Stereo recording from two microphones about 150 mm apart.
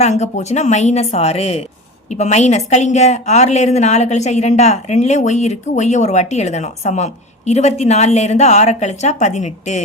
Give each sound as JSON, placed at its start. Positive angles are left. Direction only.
{"t": 0.0, "sound": "a woman's voice", "side_deg": 50}